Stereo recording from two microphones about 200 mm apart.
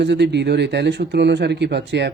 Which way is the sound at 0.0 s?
60° right (ahead or behind).